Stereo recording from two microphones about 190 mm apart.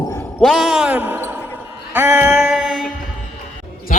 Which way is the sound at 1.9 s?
10° right (ahead or behind).